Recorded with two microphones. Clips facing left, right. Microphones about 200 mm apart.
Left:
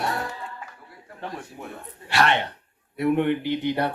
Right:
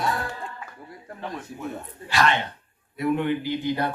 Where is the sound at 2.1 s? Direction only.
65° left (ahead or behind).